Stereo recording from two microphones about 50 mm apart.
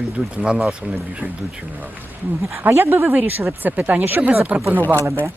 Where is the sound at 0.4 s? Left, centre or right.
Centre.